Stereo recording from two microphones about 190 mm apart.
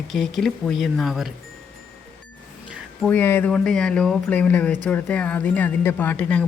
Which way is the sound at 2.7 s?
5° left (ahead or behind).